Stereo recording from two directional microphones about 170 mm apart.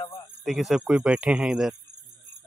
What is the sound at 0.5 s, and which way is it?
Speech, 5° right (ahead or behind).